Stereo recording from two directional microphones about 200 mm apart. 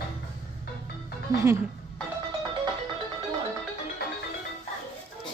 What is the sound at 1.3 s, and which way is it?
Speech, 15° right (ahead or behind).